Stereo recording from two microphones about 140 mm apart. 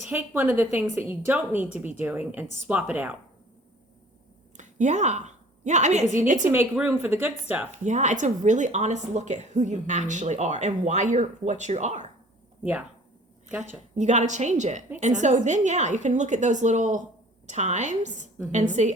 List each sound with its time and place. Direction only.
0.1 s a woman's voice: 15° right (ahead or behind)
4.5 s a woman's voice: 60° right (ahead or behind)
6.5 s a woman's voice: 15° right (ahead or behind)
7.9 s a woman's voice: 60° right (ahead or behind)
13.5 s a woman's voice: 10° right (ahead or behind)
13.9 s a woman's voice: 55° right (ahead or behind)